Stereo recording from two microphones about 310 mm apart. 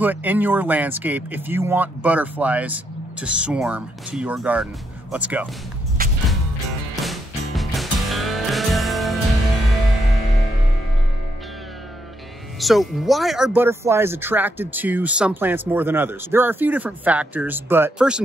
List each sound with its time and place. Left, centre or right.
0.0 s speech: centre
6.0 s music: right
7.0 s music: centre
12.5 s speech: centre